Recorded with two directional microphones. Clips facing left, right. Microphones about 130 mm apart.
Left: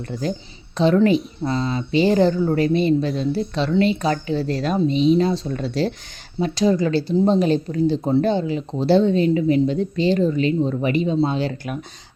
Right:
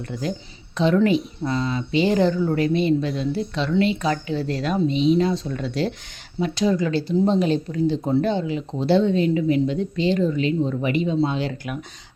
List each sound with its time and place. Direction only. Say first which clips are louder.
0.1 s speech: left 3 dB; 35° left (ahead or behind)